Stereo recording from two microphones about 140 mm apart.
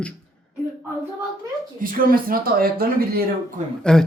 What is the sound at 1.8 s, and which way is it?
Speech, 90° right.